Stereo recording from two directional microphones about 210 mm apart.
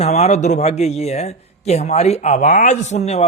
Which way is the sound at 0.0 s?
30° left (ahead or behind).